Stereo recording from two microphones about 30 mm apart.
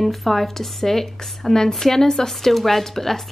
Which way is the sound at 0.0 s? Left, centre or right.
Centre.